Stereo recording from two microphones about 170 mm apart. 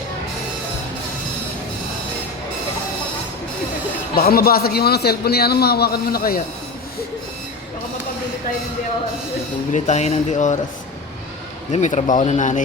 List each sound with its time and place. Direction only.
4.1 s a man's voice: 60° left (ahead or behind)
9.7 s speech: 40° left (ahead or behind)
11.7 s speech: 45° left (ahead or behind)